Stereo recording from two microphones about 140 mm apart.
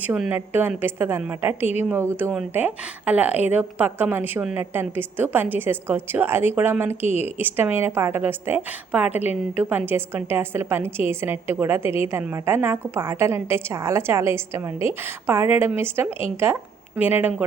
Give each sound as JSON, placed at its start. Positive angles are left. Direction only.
{"t": 0.1, "sound": "a woman's voice", "side_deg": -10}